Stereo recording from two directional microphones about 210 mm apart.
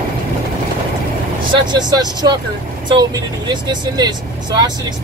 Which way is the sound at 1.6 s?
20° right (ahead or behind).